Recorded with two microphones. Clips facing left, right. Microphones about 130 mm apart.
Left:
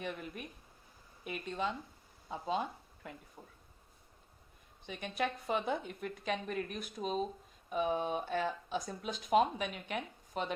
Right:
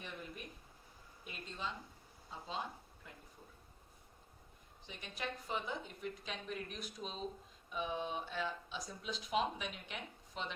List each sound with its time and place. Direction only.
1.2 s a woman's voice: 60° left (ahead or behind)
4.9 s a woman's voice: 60° left (ahead or behind)